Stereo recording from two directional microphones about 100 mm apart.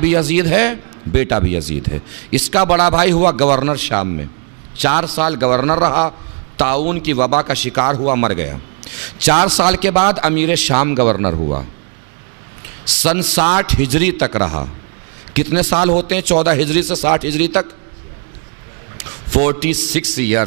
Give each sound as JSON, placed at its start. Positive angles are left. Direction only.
{"t": 0.0, "sound": "a man's voice", "side_deg": -15}
{"t": 13.0, "sound": "a man's voice", "side_deg": -10}
{"t": 18.9, "sound": "a man's voice", "side_deg": -15}